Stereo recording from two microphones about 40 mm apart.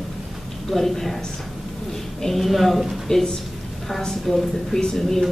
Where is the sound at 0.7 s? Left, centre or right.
Centre.